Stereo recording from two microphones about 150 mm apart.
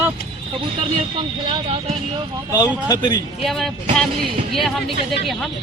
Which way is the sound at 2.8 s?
25° left (ahead or behind).